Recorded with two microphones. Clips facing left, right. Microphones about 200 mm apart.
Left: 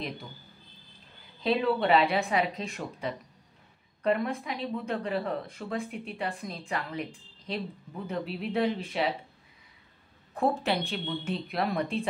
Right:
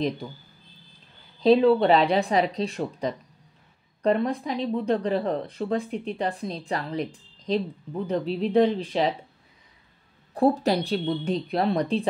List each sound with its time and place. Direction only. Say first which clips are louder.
1.4 s speech: right 9 dB; 35° right (ahead or behind)
8.1 s speech: right 8 dB; 35° right (ahead or behind)
10.3 s speech: right 6 dB; 35° right (ahead or behind)